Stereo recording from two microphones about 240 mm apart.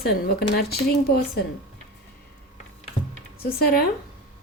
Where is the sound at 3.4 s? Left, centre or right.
Left.